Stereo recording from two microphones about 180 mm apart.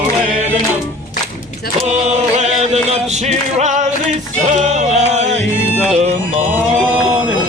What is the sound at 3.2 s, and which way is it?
Speech, 40° right (ahead or behind).